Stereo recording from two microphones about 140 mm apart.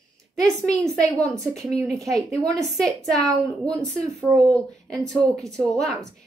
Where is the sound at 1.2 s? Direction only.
25° right (ahead or behind).